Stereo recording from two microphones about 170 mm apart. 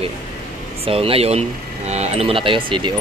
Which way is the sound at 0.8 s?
35° right (ahead or behind).